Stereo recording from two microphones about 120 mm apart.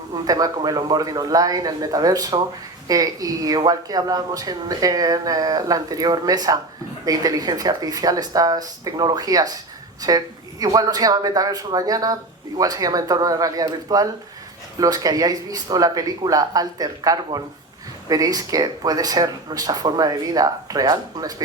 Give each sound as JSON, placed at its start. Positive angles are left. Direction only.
{"t": 0.3, "sound": "speech", "side_deg": -30}